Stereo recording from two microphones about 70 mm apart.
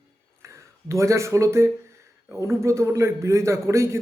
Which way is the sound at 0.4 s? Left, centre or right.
Right.